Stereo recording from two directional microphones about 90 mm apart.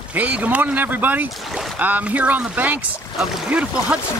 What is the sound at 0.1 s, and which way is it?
Speech, 15° right (ahead or behind).